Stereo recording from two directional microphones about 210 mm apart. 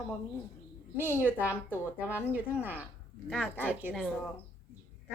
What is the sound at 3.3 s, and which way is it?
Speech, 5° left (ahead or behind).